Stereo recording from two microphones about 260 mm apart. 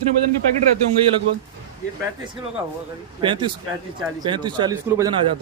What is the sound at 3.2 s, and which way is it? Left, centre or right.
Speech, centre.